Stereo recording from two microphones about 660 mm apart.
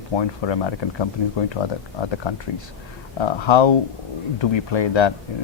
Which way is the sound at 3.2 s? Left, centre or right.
Left.